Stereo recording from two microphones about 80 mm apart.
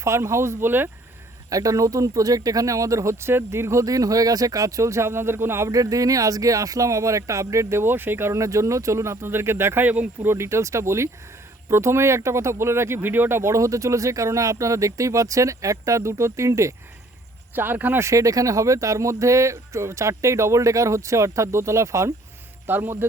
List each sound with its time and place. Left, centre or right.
0.0 s speech: right
1.5 s speech: right
10.3 s speech: right
17.5 s speech: right
18.0 s speech: right
22.6 s speech: right